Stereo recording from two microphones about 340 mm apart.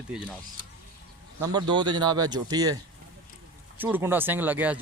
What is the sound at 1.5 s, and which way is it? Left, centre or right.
Speech, centre.